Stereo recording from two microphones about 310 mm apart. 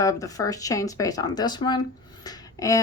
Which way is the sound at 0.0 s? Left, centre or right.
Centre.